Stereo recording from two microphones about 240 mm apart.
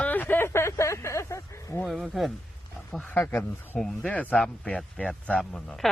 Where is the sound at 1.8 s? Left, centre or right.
Centre.